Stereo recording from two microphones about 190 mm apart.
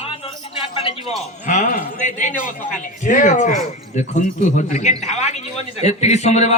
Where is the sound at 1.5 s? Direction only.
40° left (ahead or behind).